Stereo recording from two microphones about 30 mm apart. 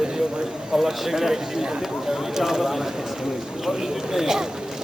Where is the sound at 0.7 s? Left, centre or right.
Centre.